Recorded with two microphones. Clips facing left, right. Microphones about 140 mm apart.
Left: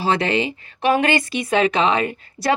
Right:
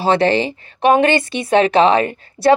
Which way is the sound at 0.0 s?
35° right (ahead or behind).